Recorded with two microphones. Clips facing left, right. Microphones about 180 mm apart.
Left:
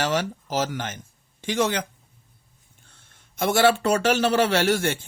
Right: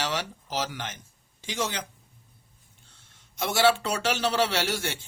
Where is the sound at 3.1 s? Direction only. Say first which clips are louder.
Left 7 dB; 50° left (ahead or behind).